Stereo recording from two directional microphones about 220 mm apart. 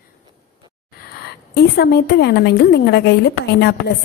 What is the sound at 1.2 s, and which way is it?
A woman's voice, 45° left (ahead or behind).